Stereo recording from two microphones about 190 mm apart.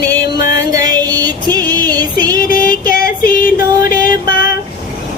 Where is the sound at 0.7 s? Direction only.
20° right (ahead or behind).